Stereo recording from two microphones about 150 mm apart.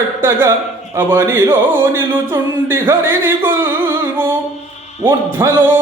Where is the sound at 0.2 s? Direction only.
15° right (ahead or behind).